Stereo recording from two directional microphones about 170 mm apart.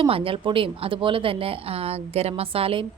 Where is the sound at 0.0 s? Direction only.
30° right (ahead or behind).